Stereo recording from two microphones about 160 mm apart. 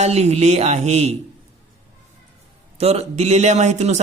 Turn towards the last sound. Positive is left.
turn(degrees=-45)  # may be behind; listen again after turning